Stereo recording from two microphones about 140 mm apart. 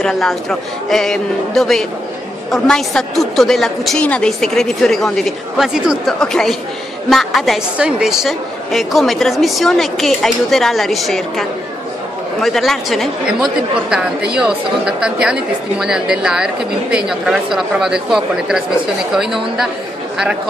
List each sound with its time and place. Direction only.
0.0 s a woman's voice: centre (ahead or behind)